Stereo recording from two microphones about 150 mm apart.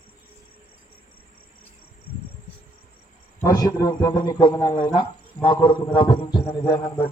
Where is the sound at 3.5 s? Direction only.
25° left (ahead or behind).